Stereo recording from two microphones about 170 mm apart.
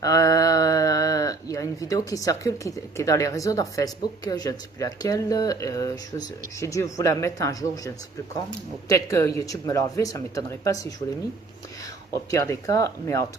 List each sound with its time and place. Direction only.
0.0 s speech: 20° left (ahead or behind)
12.3 s speech: 20° left (ahead or behind)